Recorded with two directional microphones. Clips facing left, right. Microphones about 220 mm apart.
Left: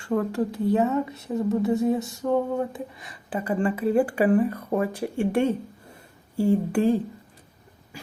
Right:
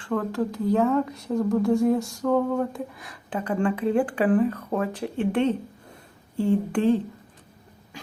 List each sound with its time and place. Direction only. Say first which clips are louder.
0.3 s speech: even; 10° left (ahead or behind)
1.9 s a sound: right 1 dB; centre (ahead or behind)
2.2 s speech: right 1 dB; 15° left (ahead or behind)
2.7 s speech: right 2 dB; centre (ahead or behind)